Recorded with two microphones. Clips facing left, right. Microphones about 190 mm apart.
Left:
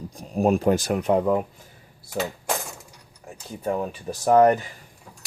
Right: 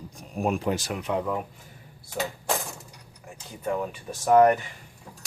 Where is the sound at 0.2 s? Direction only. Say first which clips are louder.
Left 6 dB; 35° left (ahead or behind).